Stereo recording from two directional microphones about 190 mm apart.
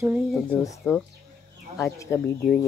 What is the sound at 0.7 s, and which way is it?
Speech, 10° left (ahead or behind).